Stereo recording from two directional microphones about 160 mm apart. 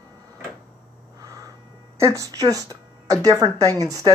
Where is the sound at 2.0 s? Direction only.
20° right (ahead or behind).